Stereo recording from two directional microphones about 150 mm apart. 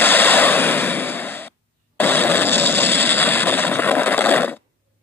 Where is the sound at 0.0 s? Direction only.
10° left (ahead or behind).